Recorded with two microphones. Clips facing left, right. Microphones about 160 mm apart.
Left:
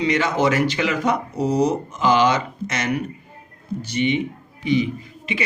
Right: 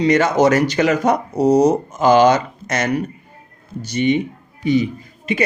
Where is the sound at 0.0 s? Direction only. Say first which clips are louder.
Right 5 dB; 45° right (ahead or behind).